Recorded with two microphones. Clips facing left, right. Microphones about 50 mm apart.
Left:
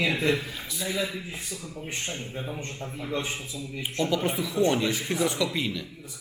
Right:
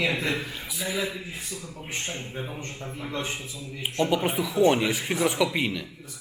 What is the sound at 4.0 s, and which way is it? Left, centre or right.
Speech, right.